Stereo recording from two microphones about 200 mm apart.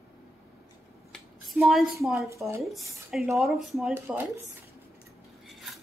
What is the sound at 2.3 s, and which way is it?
Speech, 15° right (ahead or behind).